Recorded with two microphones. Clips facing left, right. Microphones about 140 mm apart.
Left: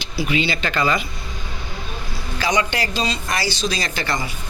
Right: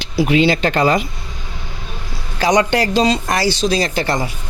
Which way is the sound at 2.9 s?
90° right.